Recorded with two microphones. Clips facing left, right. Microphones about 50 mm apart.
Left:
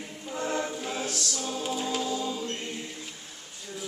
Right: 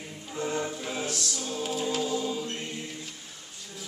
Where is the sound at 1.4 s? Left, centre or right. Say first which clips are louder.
Even; centre.